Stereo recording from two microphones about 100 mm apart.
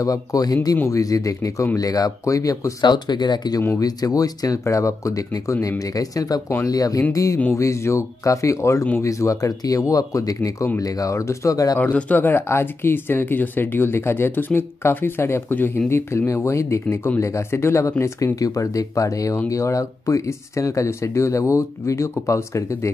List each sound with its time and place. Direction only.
0.0 s speech: 35° left (ahead or behind)
2.8 s speech: 45° left (ahead or behind)
11.8 s speech: 15° left (ahead or behind)